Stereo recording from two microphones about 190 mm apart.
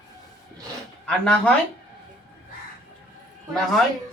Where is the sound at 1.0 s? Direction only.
5° left (ahead or behind).